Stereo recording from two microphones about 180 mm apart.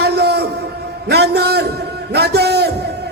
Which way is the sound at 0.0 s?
65° right (ahead or behind).